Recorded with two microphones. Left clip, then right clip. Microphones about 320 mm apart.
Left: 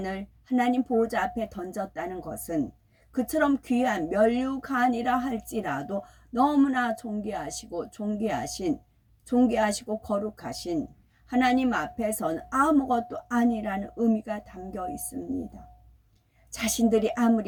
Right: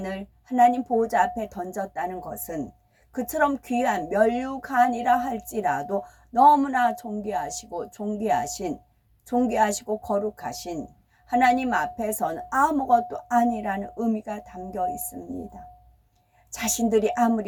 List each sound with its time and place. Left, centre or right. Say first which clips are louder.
0.0 s a woman's voice: right 1 dB; centre
16.5 s a woman's voice: right 1 dB; centre